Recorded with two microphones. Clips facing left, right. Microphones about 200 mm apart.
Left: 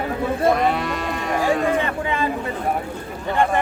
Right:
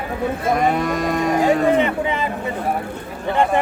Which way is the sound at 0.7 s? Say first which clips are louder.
Right 5 dB; 45° right (ahead or behind).